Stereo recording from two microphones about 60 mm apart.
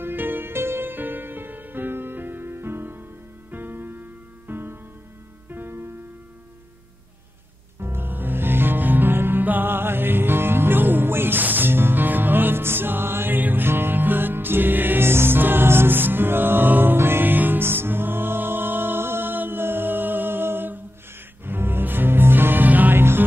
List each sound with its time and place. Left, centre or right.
0.0 s music: right
7.8 s music: right